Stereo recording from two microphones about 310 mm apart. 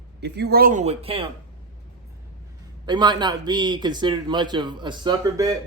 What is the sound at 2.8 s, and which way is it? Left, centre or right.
A man's voice, centre.